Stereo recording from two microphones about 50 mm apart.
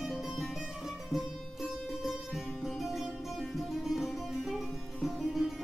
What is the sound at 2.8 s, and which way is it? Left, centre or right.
Music, centre.